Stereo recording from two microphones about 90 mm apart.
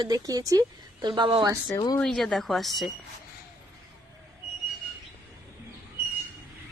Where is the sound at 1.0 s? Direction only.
60° right (ahead or behind).